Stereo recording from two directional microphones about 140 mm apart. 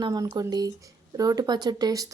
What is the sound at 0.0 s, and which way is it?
A woman's voice, 25° right (ahead or behind).